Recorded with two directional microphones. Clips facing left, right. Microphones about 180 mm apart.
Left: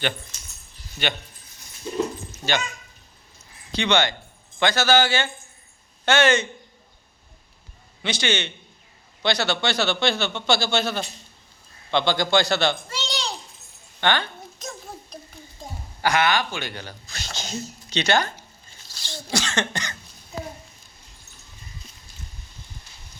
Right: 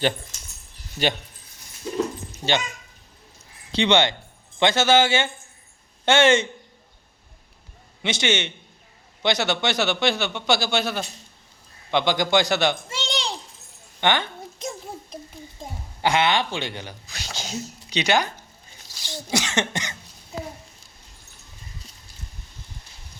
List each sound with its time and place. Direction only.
1.0 s speech: 40° right (ahead or behind)
2.4 s speech: 25° right (ahead or behind)
3.8 s speech: 25° right (ahead or behind)
8.0 s a child's voice: 20° right (ahead or behind)
14.0 s a sound: 20° right (ahead or behind)
16.0 s speech: 25° right (ahead or behind)